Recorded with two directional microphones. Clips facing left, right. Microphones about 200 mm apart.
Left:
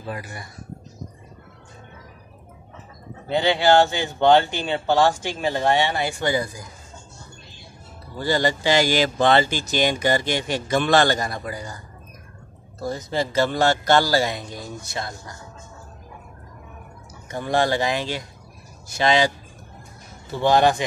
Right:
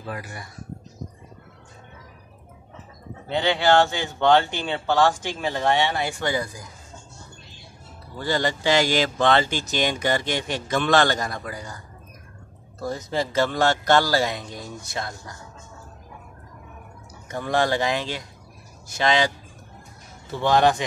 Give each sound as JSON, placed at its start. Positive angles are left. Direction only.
{"t": 3.3, "sound": "a man's voice", "side_deg": 5}
{"t": 8.2, "sound": "speech", "side_deg": 5}
{"t": 12.8, "sound": "speech", "side_deg": 0}
{"t": 17.3, "sound": "speech", "side_deg": 30}
{"t": 17.6, "sound": "speech", "side_deg": 5}
{"t": 20.3, "sound": "speech", "side_deg": 5}